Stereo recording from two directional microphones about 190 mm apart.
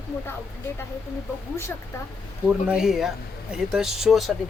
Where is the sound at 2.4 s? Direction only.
5° right (ahead or behind).